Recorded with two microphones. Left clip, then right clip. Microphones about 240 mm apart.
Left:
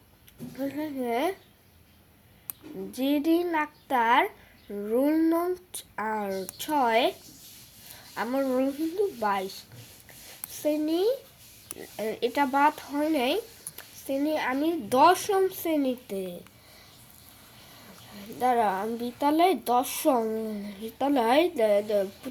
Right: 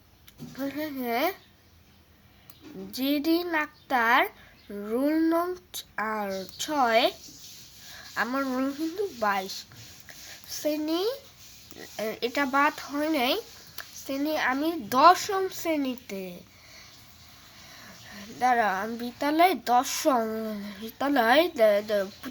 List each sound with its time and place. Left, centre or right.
0.5 s speech: centre
2.9 s speech: centre
8.1 s speech: centre
18.1 s speech: centre